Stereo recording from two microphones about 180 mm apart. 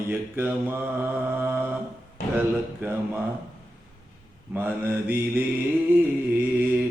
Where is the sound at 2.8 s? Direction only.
10° right (ahead or behind).